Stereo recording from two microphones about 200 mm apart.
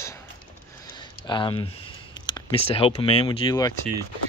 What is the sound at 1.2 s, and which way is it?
Speech, 25° left (ahead or behind).